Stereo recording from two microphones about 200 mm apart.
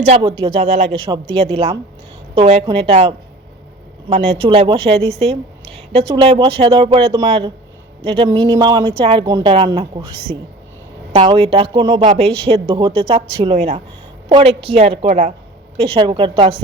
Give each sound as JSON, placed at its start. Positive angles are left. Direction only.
{"t": 0.2, "sound": "speech", "side_deg": -25}
{"t": 15.8, "sound": "speech", "side_deg": -25}